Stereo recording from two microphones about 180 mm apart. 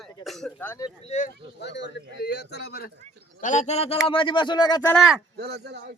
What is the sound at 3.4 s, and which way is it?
A man's voice, 45° left (ahead or behind).